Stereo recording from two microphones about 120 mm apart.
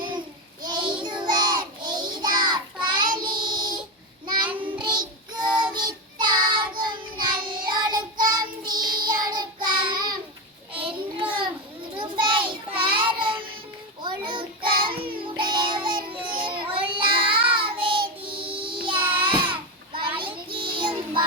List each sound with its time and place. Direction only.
0.6 s child singing: 40° right (ahead or behind)
4.4 s child singing: 15° right (ahead or behind)
4.8 s child singing: 40° right (ahead or behind)